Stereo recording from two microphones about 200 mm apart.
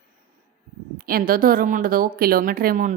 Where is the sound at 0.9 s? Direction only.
45° right (ahead or behind).